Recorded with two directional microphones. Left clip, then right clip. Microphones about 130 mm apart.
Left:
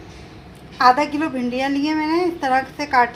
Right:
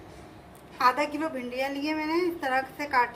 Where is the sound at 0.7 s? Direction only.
35° left (ahead or behind).